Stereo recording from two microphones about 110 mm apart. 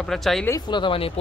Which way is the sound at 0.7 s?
50° left (ahead or behind).